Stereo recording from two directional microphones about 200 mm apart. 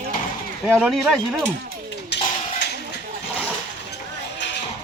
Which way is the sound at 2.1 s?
60° left (ahead or behind).